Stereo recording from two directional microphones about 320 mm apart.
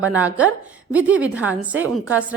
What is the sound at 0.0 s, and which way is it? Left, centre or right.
A woman's voice, centre.